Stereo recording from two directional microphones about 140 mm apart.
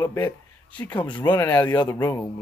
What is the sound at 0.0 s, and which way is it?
Speech, 20° left (ahead or behind).